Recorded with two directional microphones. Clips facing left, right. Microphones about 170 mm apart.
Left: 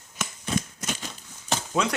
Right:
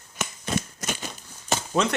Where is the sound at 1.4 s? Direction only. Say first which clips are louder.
Right 2 dB; centre (ahead or behind).